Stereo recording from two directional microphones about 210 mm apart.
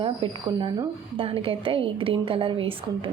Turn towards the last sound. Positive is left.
turn(degrees=-25)  # may be behind; listen again after turning